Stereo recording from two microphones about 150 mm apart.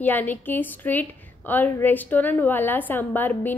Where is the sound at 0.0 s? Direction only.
10° left (ahead or behind).